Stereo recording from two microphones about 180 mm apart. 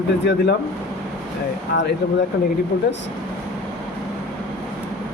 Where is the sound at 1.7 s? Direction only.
65° left (ahead or behind).